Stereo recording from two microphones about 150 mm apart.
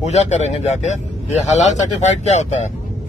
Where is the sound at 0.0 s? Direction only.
50° left (ahead or behind).